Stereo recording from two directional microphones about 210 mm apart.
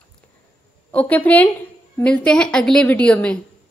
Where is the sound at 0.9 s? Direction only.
5° left (ahead or behind).